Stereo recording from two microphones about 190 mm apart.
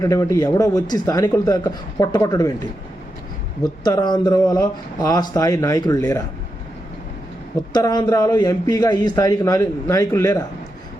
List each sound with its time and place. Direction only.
0.0 s speech: 15° left (ahead or behind)
3.6 s speech: 20° left (ahead or behind)
7.7 s a man's voice: 20° left (ahead or behind)